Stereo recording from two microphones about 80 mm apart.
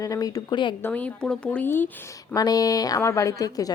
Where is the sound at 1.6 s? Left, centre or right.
Left.